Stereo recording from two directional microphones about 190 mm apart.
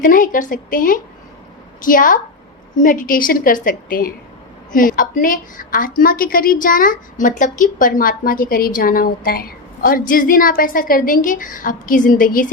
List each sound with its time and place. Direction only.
0.0 s a woman's voice: 45° left (ahead or behind)